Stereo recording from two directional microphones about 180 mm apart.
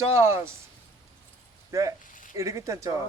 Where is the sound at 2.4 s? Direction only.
15° right (ahead or behind).